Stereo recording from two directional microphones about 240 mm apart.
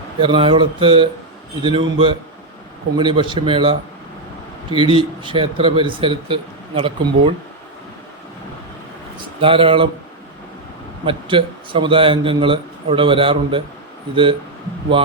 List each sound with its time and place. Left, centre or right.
0.2 s speech: right
9.4 s speech: right
11.0 s speech: right